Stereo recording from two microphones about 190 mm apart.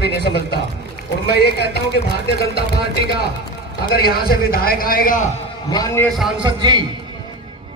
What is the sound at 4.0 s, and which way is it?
A man's voice, 55° left (ahead or behind).